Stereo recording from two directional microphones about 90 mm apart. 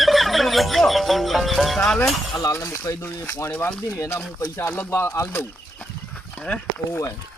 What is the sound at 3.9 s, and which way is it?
Speech, 30° left (ahead or behind).